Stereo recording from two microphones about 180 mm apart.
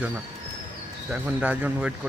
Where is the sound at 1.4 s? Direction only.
10° right (ahead or behind).